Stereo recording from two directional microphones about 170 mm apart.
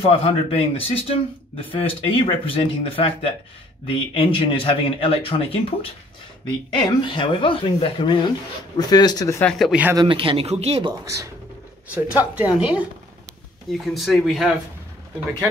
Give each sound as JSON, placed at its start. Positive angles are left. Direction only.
{"t": 0.0, "sound": "speech", "side_deg": 35}
{"t": 9.4, "sound": "speech", "side_deg": 0}
{"t": 9.9, "sound": "speech", "side_deg": -30}
{"t": 11.9, "sound": "speech", "side_deg": -10}